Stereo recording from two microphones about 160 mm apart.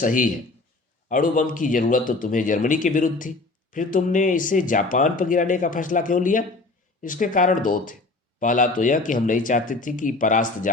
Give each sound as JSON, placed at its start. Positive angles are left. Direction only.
{"t": 0.0, "sound": "speech", "side_deg": 55}